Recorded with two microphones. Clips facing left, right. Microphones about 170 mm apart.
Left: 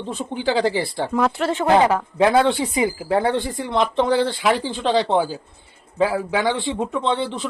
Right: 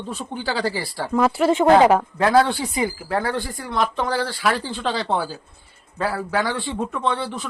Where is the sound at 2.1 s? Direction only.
20° left (ahead or behind).